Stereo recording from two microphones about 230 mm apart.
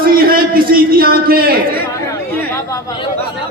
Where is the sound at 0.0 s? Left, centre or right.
Right.